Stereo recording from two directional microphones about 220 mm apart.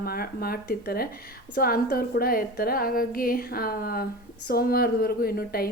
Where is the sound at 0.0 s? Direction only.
45° left (ahead or behind).